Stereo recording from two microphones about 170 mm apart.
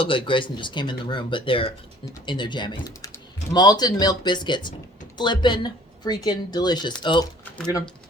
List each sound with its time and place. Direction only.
0.0 s a woman's voice: 30° left (ahead or behind)